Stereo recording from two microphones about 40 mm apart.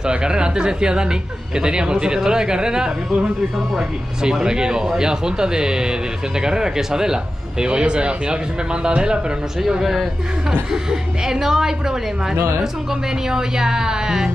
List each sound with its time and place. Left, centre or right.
0.0 s speech: right
4.2 s speech: centre
10.7 s speech: centre
13.3 s speech: centre